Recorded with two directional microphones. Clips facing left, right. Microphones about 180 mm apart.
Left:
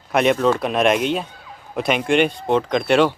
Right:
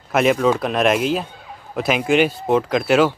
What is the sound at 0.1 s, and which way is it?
Speech, centre (ahead or behind).